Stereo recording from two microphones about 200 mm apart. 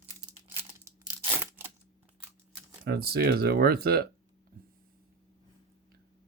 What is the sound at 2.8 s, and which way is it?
Speech, 50° right (ahead or behind).